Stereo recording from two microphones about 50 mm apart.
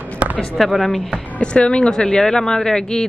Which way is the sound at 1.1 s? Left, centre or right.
Left.